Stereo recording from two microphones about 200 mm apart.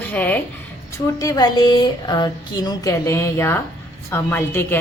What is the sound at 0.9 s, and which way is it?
A woman's voice, 15° left (ahead or behind).